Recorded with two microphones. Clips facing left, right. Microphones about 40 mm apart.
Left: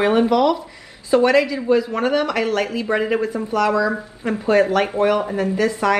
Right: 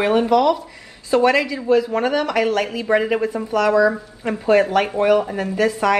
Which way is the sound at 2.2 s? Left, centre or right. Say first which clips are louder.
Right 1 dB; centre.